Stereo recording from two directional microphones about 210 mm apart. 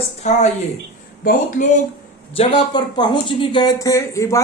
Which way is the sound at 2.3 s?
25° left (ahead or behind).